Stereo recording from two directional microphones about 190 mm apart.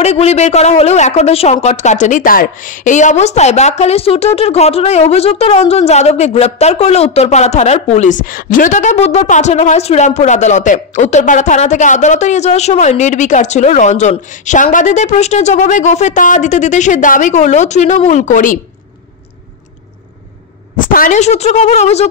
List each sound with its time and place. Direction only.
0.0 s speech: 35° left (ahead or behind)
20.7 s speech: 45° left (ahead or behind)